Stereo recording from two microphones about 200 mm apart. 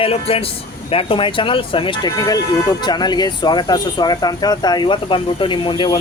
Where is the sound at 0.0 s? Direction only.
30° left (ahead or behind).